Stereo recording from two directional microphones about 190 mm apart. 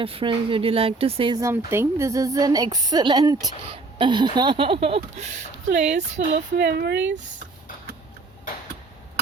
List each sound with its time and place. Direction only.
0.0 s speech: 30° right (ahead or behind)
6.6 s speech: 60° right (ahead or behind)